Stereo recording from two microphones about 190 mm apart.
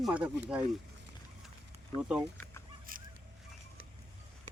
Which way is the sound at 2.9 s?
45° right (ahead or behind).